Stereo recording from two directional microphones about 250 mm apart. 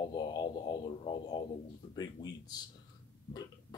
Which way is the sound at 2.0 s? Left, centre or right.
Centre.